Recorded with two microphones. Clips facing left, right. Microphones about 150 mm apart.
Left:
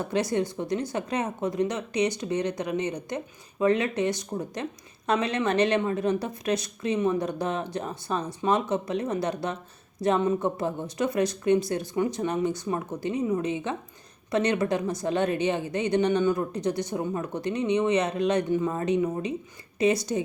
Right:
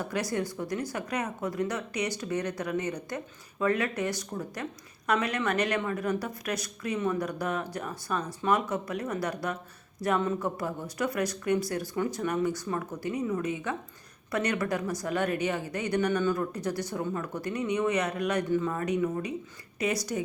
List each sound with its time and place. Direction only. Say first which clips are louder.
0.0 s speech: left 5 dB; 25° left (ahead or behind)